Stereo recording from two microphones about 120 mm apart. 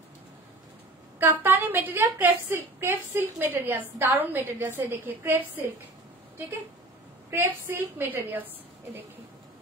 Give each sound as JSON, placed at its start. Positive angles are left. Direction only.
{"t": 1.2, "sound": "a woman's voice", "side_deg": -15}
{"t": 7.2, "sound": "a woman's voice", "side_deg": -20}